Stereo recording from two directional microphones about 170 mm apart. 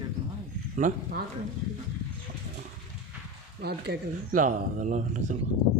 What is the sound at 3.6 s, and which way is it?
Speech, 70° right (ahead or behind).